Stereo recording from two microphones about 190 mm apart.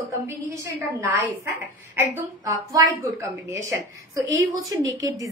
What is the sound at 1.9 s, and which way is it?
A woman's voice, 10° right (ahead or behind).